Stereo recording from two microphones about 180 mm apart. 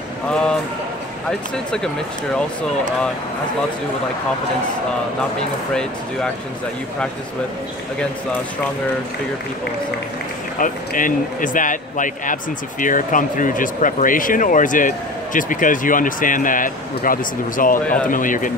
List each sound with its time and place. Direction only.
10.6 s speech: 45° left (ahead or behind)